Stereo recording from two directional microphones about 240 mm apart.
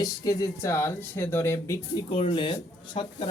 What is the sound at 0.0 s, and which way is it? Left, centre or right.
Speech, centre.